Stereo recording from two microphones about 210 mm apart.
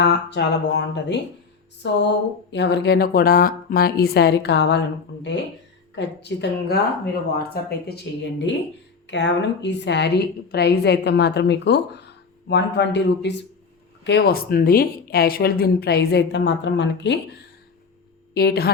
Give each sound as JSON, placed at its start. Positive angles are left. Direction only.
{"t": 0.0, "sound": "a woman's voice", "side_deg": 55}
{"t": 5.9, "sound": "a woman's voice", "side_deg": 55}
{"t": 18.3, "sound": "a woman's voice", "side_deg": 50}